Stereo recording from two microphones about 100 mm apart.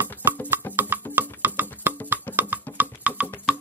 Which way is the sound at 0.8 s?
20° right (ahead or behind).